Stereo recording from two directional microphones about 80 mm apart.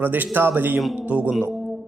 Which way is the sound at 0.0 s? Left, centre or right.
Right.